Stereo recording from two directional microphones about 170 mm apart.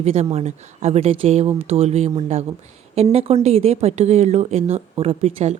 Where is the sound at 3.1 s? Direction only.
40° right (ahead or behind).